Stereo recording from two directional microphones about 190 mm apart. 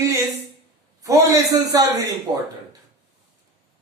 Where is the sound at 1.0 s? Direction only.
15° right (ahead or behind).